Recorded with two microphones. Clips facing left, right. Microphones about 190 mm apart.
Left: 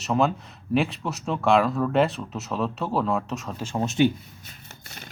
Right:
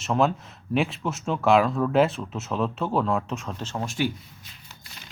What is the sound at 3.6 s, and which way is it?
Speech, 20° left (ahead or behind).